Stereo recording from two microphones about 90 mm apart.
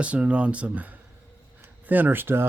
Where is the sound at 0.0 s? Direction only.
15° right (ahead or behind).